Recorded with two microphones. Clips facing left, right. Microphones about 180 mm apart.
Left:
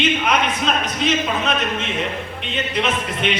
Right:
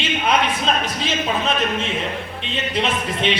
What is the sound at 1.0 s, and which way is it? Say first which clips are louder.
A man's voice: left 2 dB; 35° right (ahead or behind).